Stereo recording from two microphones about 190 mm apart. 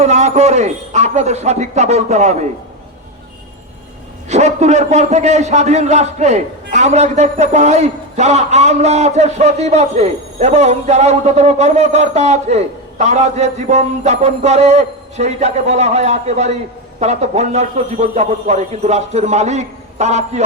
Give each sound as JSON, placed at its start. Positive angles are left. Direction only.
{"t": 0.0, "sound": "a man's voice", "side_deg": -35}
{"t": 4.3, "sound": "a man's voice", "side_deg": -35}